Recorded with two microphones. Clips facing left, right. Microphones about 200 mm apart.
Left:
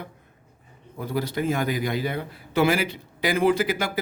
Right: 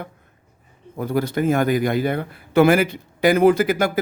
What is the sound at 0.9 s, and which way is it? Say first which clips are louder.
Speech: right 5 dB; 50° right (ahead or behind).